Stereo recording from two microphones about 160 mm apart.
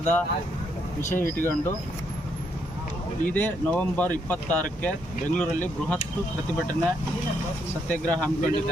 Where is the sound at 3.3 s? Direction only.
10° left (ahead or behind).